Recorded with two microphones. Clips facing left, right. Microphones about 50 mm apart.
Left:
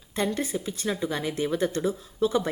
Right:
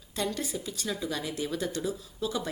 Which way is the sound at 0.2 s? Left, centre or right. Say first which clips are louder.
Left 5 dB; left.